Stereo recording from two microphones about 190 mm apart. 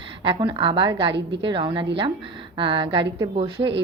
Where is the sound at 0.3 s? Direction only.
25° right (ahead or behind).